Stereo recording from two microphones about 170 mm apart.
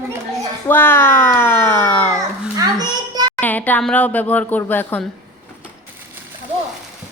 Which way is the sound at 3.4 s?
10° left (ahead or behind).